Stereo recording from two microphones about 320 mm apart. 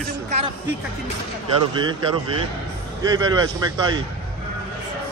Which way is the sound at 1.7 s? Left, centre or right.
Centre.